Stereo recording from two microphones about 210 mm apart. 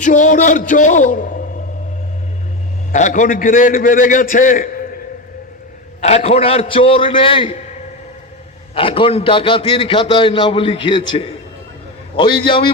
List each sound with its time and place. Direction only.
0.0 s a man's voice: 35° left (ahead or behind)
2.9 s a man's voice: 35° left (ahead or behind)
6.0 s a man's voice: 30° left (ahead or behind)
8.7 s a man's voice: 25° left (ahead or behind)